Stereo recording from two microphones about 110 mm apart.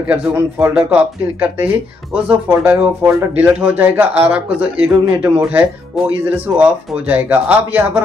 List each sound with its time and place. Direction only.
0.0 s speech: 15° right (ahead or behind)